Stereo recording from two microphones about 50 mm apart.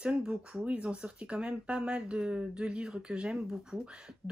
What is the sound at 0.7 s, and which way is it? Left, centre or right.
Speech, right.